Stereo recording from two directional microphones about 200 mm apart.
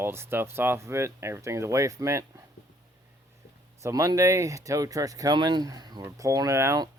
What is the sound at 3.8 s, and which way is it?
Speech, 15° right (ahead or behind).